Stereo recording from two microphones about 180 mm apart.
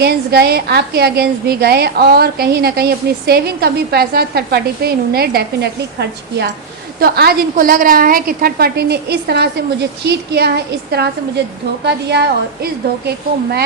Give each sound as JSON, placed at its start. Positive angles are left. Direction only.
{"t": 0.0, "sound": "a woman's voice", "side_deg": -60}
{"t": 7.0, "sound": "a woman's voice", "side_deg": -60}